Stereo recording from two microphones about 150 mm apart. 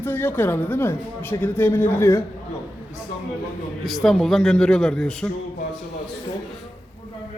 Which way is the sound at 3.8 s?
Centre (ahead or behind).